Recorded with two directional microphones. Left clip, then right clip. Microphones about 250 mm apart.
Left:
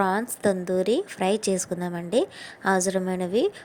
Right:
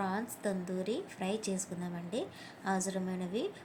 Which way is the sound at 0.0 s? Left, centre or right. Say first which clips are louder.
Left 13 dB; left.